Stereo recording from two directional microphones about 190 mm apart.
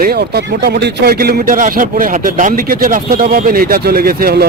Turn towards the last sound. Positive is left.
turn(degrees=-55)  # may be behind; listen again after turning